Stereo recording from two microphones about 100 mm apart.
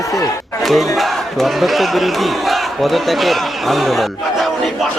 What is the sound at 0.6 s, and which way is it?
Speech, centre (ahead or behind).